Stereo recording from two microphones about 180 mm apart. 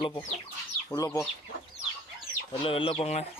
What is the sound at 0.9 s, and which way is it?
Speech, 15° left (ahead or behind).